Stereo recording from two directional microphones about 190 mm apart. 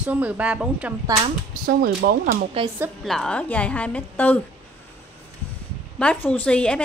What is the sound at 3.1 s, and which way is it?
A woman's voice, 5° left (ahead or behind).